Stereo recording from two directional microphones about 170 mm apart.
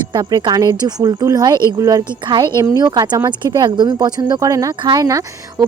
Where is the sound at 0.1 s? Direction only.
25° right (ahead or behind).